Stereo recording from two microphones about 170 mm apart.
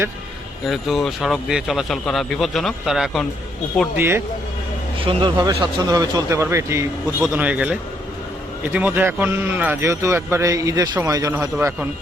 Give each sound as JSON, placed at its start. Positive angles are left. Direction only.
{"t": 0.7, "sound": "speech", "side_deg": 0}
{"t": 3.9, "sound": "speech", "side_deg": -15}
{"t": 4.9, "sound": "speech", "side_deg": -30}
{"t": 11.5, "sound": "speech", "side_deg": -10}